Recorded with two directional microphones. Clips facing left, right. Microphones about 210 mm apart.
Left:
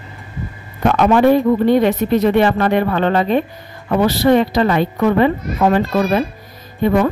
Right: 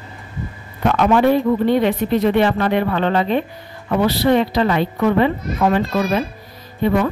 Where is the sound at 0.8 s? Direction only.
45° left (ahead or behind).